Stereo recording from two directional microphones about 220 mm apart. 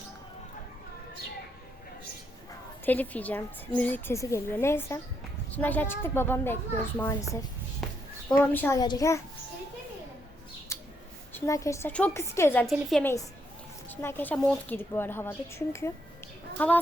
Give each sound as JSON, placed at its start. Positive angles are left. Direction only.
{"t": 2.8, "sound": "a woman's voice", "side_deg": 10}
{"t": 7.8, "sound": "a sound", "side_deg": 0}
{"t": 8.4, "sound": "a woman's voice", "side_deg": 10}
{"t": 10.7, "sound": "bird", "side_deg": 15}
{"t": 11.3, "sound": "a woman's voice", "side_deg": 15}